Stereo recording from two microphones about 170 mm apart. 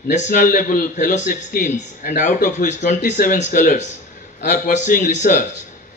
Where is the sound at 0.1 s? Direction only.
45° left (ahead or behind).